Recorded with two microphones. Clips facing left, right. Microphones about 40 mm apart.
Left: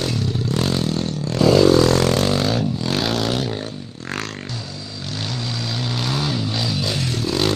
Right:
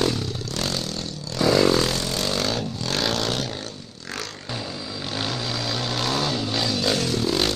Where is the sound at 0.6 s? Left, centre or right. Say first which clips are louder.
Left 5 dB; centre.